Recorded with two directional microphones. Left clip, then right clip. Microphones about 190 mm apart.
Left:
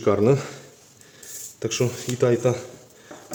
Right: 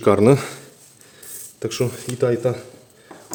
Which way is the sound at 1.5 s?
20° right (ahead or behind).